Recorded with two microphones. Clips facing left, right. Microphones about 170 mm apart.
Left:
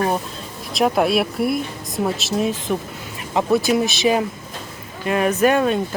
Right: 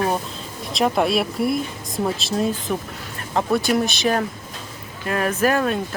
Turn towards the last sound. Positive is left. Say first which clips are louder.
# left 3 dB
turn(degrees=0)  # may be behind; listen again after turning